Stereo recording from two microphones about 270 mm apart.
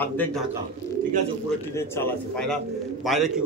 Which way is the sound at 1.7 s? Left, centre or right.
Centre.